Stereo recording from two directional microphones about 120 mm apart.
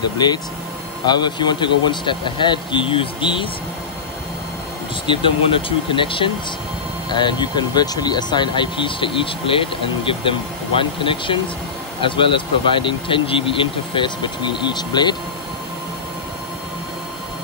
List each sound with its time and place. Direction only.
0.2 s speech: 35° left (ahead or behind)
5.0 s speech: 45° left (ahead or behind)